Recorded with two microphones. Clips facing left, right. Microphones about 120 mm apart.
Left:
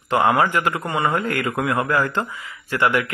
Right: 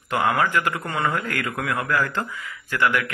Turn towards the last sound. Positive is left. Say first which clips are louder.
# left 2 dB
turn(degrees=20)  # may be behind; listen again after turning